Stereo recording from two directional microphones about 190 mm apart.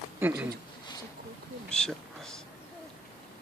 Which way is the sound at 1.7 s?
5° left (ahead or behind).